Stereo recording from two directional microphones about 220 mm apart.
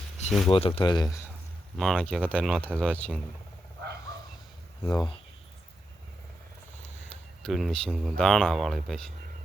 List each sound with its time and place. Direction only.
0.3 s speech: centre (ahead or behind)
0.5 s speech: 25° left (ahead or behind)
1.8 s speech: centre (ahead or behind)
2.8 s speech: 5° left (ahead or behind)
4.8 s speech: 5° left (ahead or behind)
7.4 s speech: centre (ahead or behind)